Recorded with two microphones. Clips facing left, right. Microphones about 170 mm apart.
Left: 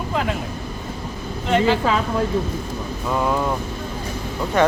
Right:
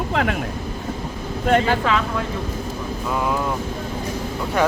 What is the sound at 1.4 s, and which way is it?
Speech, 50° right (ahead or behind).